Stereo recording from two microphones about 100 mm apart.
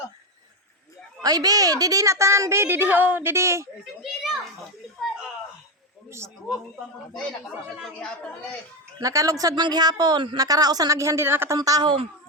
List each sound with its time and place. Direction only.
1.2 s a woman's voice: 40° right (ahead or behind)
4.0 s a child's voice: 5° right (ahead or behind)
6.1 s speech: 25° right (ahead or behind)
7.9 s speech: 10° left (ahead or behind)
9.0 s speech: 35° right (ahead or behind)
11.5 s speech: 35° right (ahead or behind)